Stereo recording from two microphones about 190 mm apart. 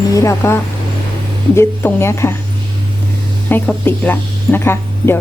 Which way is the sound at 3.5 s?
10° left (ahead or behind).